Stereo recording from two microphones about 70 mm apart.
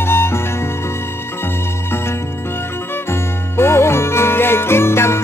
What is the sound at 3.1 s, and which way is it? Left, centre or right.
Music, left.